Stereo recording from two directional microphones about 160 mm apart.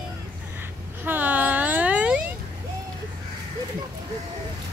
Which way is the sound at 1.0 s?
10° right (ahead or behind).